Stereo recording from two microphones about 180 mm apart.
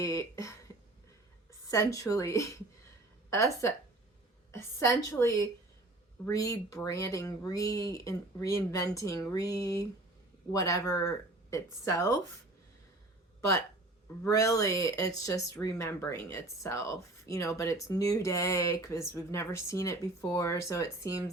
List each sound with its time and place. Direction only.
0.0 s a woman's voice: 15° left (ahead or behind)
6.2 s speech: 20° left (ahead or behind)
14.3 s speech: 15° left (ahead or behind)